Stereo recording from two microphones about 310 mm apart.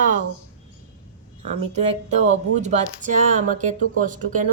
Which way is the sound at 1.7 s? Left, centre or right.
Right.